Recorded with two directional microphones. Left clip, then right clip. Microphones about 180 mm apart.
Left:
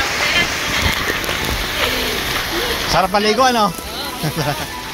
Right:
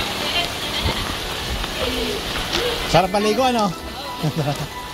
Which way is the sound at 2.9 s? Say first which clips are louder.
Left 3 dB; 15° right (ahead or behind).